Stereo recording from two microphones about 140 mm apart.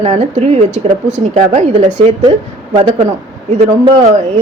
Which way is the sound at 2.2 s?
40° right (ahead or behind).